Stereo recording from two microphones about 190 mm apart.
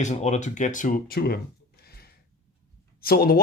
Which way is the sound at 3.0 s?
55° left (ahead or behind).